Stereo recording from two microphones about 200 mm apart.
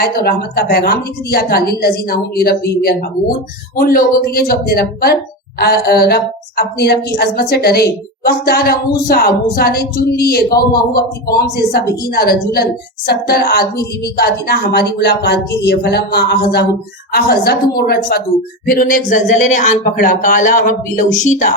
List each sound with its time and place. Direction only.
0.0 s a woman's voice: 50° left (ahead or behind)